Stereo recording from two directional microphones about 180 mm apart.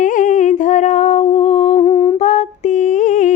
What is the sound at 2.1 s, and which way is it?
Humming, 40° left (ahead or behind).